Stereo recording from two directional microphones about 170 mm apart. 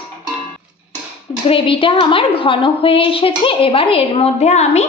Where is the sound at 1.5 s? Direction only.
30° left (ahead or behind).